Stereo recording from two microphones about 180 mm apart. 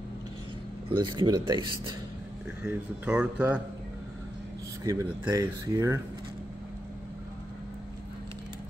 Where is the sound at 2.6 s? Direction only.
5° right (ahead or behind).